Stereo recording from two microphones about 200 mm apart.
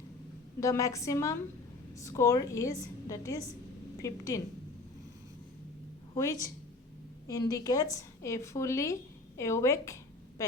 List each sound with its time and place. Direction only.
0.6 s a woman's voice: 15° left (ahead or behind)
7.3 s a woman's voice: 15° left (ahead or behind)